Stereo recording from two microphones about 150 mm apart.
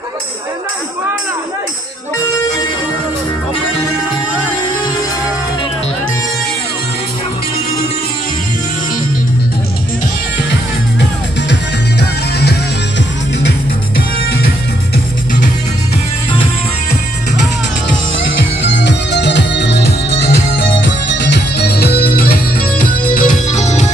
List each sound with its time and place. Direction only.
12.0 s music: 90° left
19.8 s music: 90° left
21.5 s music: 90° left
22.8 s music: 65° left (ahead or behind)